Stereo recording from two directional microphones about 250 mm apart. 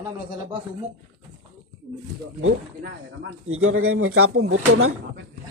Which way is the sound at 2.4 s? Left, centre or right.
Right.